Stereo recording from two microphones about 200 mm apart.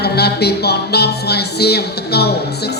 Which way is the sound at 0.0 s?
55° left (ahead or behind).